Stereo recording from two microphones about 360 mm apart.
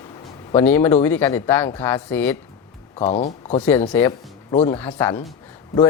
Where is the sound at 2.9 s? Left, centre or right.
Centre.